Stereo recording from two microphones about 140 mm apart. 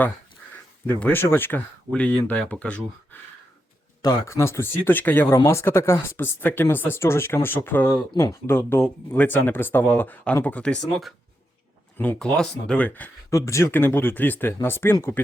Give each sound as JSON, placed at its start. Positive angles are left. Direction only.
{"t": 0.5, "sound": "speech", "side_deg": 10}
{"t": 4.0, "sound": "speech", "side_deg": 25}